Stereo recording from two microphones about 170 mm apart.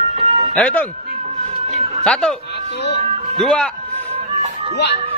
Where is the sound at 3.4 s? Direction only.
5° left (ahead or behind).